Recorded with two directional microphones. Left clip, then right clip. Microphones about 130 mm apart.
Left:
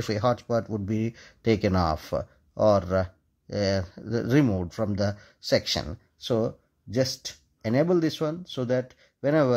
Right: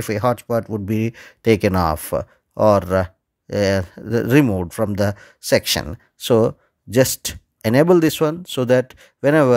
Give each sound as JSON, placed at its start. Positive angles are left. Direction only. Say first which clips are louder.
{"t": 0.0, "sound": "speech", "louder": "right 6 dB", "side_deg": -30}